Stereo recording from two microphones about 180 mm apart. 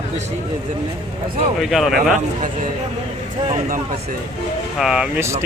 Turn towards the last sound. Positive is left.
turn(degrees=-15)  # may be behind; listen again after turning